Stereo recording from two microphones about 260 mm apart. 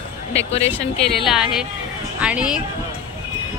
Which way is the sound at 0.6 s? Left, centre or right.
Centre.